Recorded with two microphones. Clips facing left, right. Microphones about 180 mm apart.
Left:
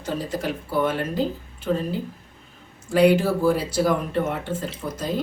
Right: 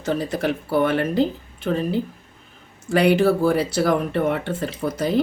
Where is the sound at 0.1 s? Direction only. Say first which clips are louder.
Right 4 dB; 70° right (ahead or behind).